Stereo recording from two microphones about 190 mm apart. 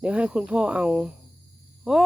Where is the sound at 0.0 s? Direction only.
5° right (ahead or behind).